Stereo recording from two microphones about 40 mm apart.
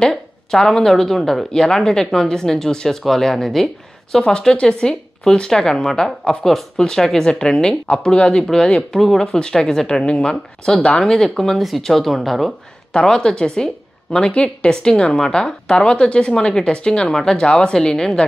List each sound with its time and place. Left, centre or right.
0.1 s a woman's voice: centre
7.2 s a woman's voice: centre
8.9 s a woman's voice: centre
9.2 s a woman's voice: centre
12.9 s a woman's voice: centre